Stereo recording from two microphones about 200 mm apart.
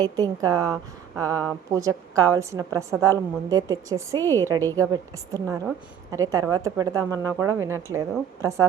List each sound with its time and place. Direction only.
0.0 s a woman's voice: 20° right (ahead or behind)